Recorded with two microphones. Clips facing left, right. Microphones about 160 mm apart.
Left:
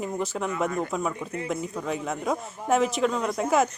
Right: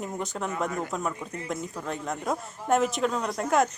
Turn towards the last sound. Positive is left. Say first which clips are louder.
# left 1 dB
turn(degrees=0)  # may be behind; listen again after turning